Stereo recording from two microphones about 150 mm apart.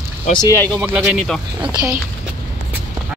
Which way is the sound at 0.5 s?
10° left (ahead or behind).